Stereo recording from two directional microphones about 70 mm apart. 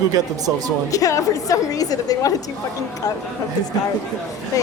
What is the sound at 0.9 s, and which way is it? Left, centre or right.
A woman's voice, left.